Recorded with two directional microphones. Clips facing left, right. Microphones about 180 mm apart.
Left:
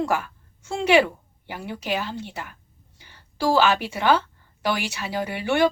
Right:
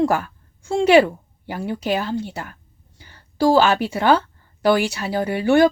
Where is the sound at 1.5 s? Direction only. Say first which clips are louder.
Right 6 dB; 45° right (ahead or behind).